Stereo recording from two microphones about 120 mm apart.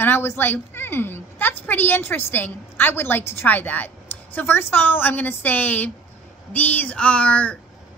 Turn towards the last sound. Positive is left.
turn(degrees=10)  # may be behind; listen again after turning